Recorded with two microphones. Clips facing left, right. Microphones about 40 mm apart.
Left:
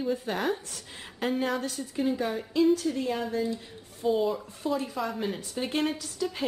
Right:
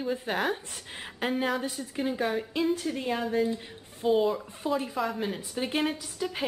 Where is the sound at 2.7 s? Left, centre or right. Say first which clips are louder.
Left 2 dB; right.